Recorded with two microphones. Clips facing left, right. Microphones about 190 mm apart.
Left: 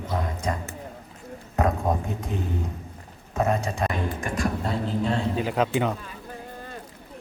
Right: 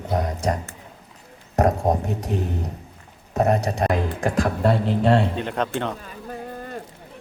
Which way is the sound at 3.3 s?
40° right (ahead or behind).